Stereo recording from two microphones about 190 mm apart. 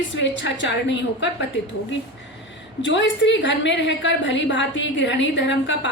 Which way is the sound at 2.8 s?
70° left (ahead or behind).